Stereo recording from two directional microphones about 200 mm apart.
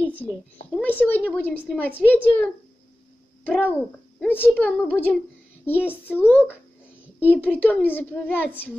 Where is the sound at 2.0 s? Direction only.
5° right (ahead or behind).